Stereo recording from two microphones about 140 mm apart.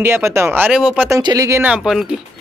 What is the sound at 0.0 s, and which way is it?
Speech, 15° right (ahead or behind).